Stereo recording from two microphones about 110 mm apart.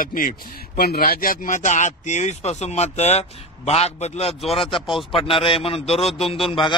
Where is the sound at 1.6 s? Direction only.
90° left; by 4.4 s 70° left (ahead or behind).